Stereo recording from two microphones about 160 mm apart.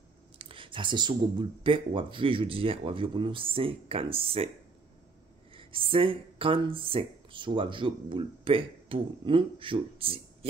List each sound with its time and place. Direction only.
0.4 s speech: 35° right (ahead or behind)
5.5 s speech: 35° right (ahead or behind)